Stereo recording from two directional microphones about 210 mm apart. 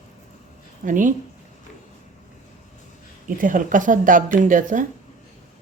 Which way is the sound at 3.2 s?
40° right (ahead or behind).